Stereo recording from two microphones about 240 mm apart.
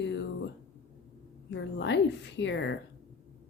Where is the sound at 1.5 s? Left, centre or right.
Left.